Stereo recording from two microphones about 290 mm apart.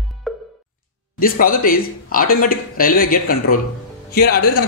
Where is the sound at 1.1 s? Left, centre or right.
Left.